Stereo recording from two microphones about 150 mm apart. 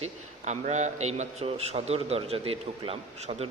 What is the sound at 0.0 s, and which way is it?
A man's voice, 50° right (ahead or behind).